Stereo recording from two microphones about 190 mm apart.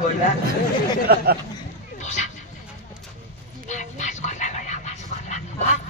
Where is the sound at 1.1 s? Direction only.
55° right (ahead or behind).